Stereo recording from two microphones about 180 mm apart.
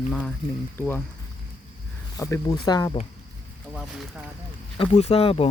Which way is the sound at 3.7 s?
Centre (ahead or behind).